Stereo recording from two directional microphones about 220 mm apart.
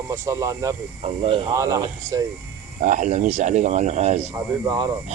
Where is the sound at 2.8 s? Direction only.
35° right (ahead or behind).